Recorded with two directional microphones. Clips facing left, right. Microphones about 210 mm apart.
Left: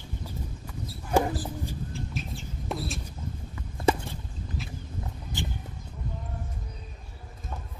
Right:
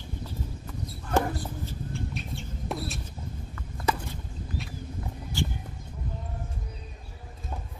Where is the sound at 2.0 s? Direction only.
Centre (ahead or behind).